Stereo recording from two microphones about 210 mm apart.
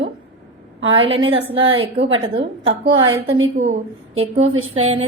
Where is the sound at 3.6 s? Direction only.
30° right (ahead or behind).